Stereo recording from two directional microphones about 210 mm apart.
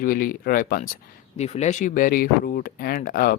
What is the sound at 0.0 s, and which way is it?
Speech, 40° left (ahead or behind).